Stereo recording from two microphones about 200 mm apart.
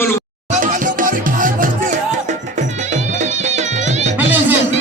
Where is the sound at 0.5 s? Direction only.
40° right (ahead or behind).